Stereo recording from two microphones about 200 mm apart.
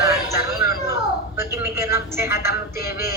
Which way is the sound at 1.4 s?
15° right (ahead or behind).